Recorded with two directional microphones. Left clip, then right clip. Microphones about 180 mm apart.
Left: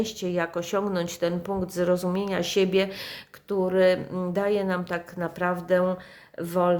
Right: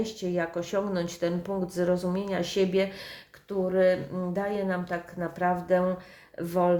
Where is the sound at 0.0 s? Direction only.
30° left (ahead or behind).